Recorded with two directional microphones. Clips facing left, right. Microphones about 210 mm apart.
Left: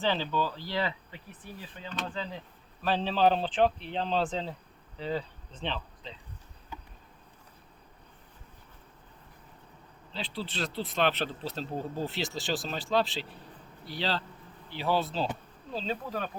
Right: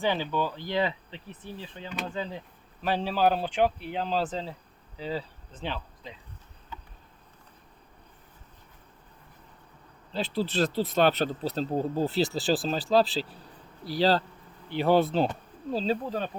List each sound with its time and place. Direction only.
0.0 s speech: 15° right (ahead or behind)
2.8 s speech: 10° right (ahead or behind)
4.9 s insect: 5° right (ahead or behind)
10.1 s speech: 40° right (ahead or behind)
14.7 s speech: 55° right (ahead or behind)
15.7 s speech: 40° right (ahead or behind)
16.0 s speech: 25° right (ahead or behind)